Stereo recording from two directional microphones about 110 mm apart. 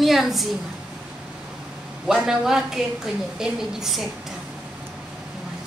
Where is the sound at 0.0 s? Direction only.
Centre (ahead or behind).